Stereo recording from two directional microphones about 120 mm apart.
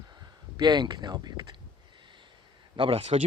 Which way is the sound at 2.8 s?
50° right (ahead or behind).